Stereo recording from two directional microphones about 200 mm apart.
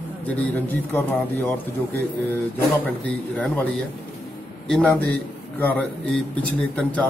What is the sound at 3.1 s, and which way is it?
A man's voice, 5° left (ahead or behind).